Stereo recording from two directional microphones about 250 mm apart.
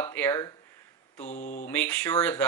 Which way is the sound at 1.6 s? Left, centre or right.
Centre.